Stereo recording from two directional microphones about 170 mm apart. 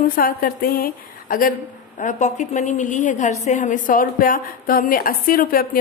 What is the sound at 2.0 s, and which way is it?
A woman's voice, 45° left (ahead or behind).